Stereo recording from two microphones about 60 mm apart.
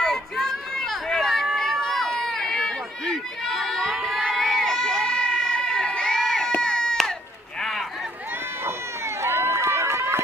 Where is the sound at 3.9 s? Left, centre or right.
Centre.